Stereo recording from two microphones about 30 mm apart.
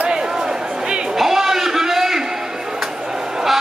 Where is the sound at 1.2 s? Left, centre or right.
Centre.